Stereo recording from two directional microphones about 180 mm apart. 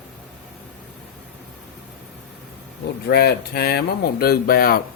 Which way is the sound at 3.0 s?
65° left (ahead or behind).